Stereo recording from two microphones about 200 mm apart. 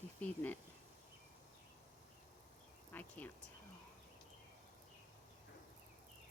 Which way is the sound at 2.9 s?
10° left (ahead or behind).